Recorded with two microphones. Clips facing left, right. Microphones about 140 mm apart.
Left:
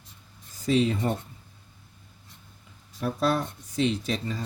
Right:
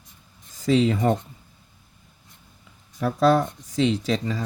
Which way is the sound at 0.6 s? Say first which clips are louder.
Right 4 dB; 90° right.